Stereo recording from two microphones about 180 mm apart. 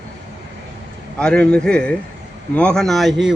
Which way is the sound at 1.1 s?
5° left (ahead or behind).